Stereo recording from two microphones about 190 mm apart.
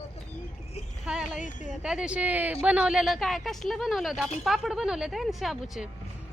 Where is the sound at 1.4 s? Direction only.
40° left (ahead or behind).